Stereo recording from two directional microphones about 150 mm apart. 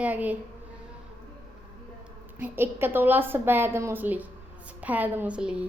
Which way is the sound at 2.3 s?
15° right (ahead or behind).